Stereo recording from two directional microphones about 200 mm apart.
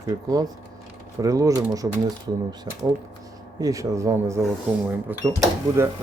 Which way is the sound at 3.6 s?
15° right (ahead or behind).